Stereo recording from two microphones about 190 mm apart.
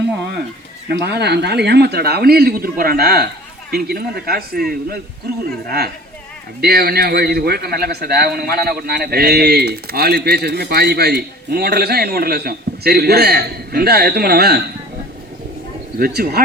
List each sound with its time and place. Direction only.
0.9 s a man's voice: 60° right (ahead or behind)
16.0 s speech: 50° right (ahead or behind)